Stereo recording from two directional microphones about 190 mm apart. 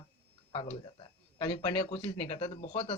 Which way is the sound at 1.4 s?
35° left (ahead or behind).